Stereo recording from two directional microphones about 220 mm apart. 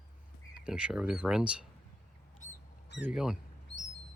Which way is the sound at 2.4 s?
35° left (ahead or behind).